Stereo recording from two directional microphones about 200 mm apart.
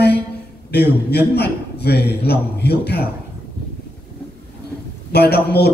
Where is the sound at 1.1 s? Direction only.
55° left (ahead or behind).